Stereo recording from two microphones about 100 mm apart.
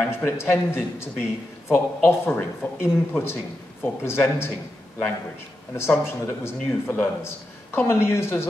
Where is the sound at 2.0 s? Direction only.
25° left (ahead or behind).